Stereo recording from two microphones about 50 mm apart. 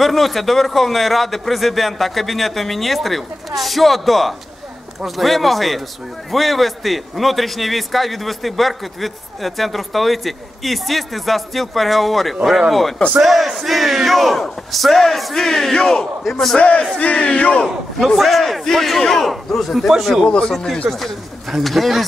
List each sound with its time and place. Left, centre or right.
0.0 s a man's voice: centre
16.5 s battle cry: left
17.9 s a man's voice: centre
20.2 s a man's voice: centre